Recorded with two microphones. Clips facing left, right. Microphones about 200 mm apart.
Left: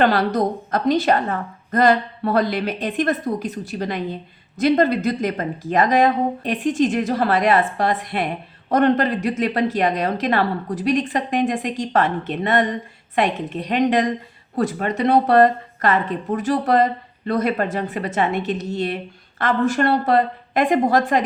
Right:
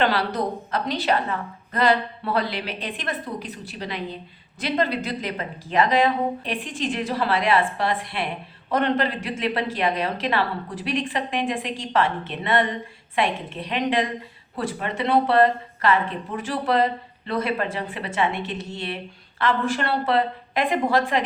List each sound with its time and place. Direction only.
0.0 s speech: 45° left (ahead or behind)